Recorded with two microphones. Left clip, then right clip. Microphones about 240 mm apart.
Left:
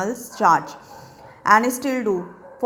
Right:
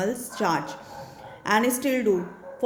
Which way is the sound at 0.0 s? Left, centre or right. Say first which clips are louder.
Left 7 dB; centre.